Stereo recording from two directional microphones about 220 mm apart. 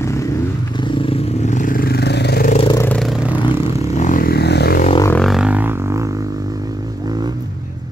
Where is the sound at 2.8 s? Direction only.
Centre (ahead or behind).